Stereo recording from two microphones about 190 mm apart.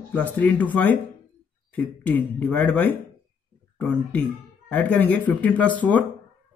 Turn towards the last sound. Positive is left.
turn(degrees=10)  # may be behind; listen again after turning